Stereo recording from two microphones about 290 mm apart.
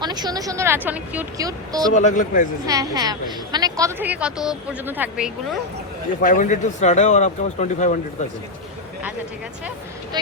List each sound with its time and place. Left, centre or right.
0.0 s a woman's voice: centre
1.9 s speech: left
2.6 s a woman's voice: centre
6.2 s speech: left